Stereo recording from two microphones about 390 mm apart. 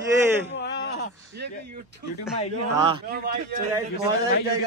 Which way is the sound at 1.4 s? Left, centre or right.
Right.